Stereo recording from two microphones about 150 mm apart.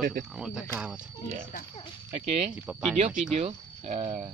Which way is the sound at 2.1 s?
40° right (ahead or behind).